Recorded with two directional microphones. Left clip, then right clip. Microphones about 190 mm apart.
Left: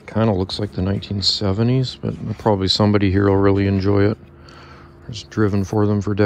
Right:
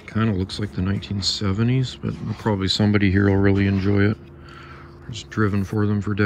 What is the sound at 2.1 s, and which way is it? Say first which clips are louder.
Speech: left 3 dB; centre (ahead or behind).